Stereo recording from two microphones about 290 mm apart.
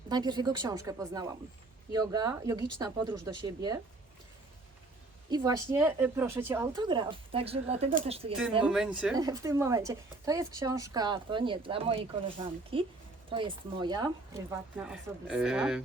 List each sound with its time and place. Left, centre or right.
0.1 s a woman's voice: centre
5.3 s a woman's voice: centre
8.6 s a woman's voice: centre